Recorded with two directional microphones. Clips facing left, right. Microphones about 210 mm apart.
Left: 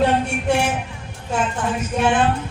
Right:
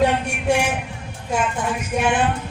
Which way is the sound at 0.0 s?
10° right (ahead or behind).